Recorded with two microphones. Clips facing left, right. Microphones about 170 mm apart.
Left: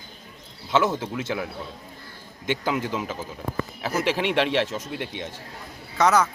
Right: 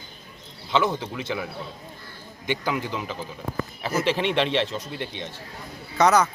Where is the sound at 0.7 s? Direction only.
10° left (ahead or behind).